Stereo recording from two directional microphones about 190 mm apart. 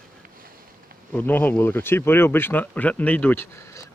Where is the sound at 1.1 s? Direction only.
10° left (ahead or behind).